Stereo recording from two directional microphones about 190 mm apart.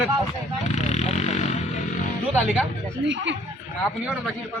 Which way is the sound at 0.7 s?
35° left (ahead or behind).